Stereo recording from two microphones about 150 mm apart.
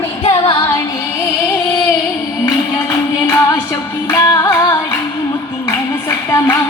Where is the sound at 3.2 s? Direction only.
20° left (ahead or behind).